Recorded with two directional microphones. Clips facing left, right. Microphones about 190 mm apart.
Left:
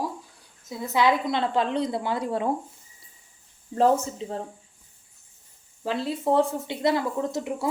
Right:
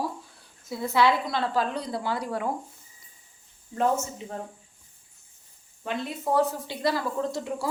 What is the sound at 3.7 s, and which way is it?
Speech, 30° left (ahead or behind).